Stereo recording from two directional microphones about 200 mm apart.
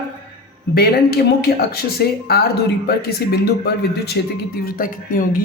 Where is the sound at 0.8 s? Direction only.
50° left (ahead or behind).